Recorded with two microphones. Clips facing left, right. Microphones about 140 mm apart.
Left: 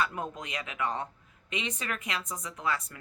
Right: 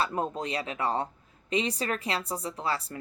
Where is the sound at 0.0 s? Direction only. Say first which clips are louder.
Right 3 dB; 35° right (ahead or behind).